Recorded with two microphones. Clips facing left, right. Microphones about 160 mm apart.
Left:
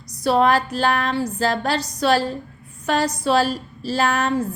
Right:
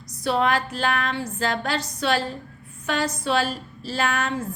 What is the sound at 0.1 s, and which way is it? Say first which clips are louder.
A woman's voice: left 5 dB; 40° left (ahead or behind).